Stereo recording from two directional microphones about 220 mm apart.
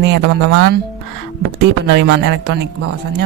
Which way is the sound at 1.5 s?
50° right (ahead or behind).